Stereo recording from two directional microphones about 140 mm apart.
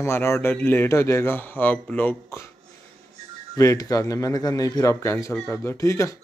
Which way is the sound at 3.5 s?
25° left (ahead or behind).